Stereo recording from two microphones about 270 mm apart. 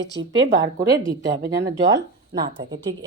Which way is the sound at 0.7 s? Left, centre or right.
Centre.